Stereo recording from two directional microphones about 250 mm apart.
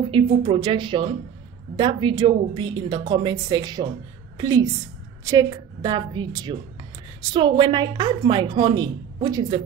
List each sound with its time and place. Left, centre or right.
0.0 s a woman's voice: centre